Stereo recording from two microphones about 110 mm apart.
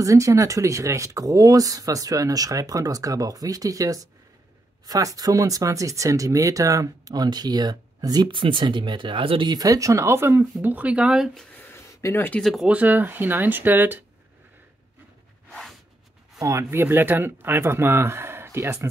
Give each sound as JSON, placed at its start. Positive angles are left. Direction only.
{"t": 0.0, "sound": "speech", "side_deg": -30}
{"t": 9.5, "sound": "speech", "side_deg": -30}
{"t": 11.5, "sound": "a sound", "side_deg": 20}
{"t": 12.4, "sound": "speech", "side_deg": 0}
{"t": 12.6, "sound": "speech", "side_deg": -15}
{"t": 16.3, "sound": "speech", "side_deg": -25}